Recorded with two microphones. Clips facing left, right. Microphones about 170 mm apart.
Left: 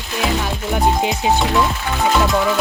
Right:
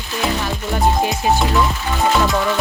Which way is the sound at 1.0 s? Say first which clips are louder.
Even; 20° left (ahead or behind).